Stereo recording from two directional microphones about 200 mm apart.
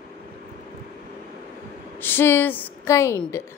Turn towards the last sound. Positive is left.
turn(degrees=15)  # may be behind; listen again after turning